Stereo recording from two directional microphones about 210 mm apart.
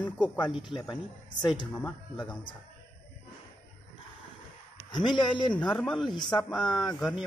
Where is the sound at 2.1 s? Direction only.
20° left (ahead or behind).